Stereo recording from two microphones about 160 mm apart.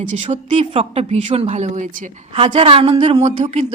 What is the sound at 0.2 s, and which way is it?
A woman's voice, 45° right (ahead or behind).